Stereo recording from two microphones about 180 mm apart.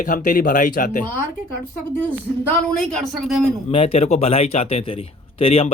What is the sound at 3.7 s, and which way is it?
A man's voice, 30° left (ahead or behind).